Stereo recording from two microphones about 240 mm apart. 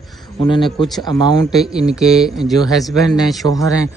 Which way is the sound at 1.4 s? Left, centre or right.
Centre.